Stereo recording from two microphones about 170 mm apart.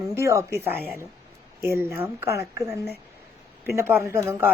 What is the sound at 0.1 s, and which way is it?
Speech, 15° right (ahead or behind).